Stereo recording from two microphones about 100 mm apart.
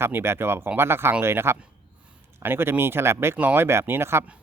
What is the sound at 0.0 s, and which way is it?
Speech, 25° right (ahead or behind).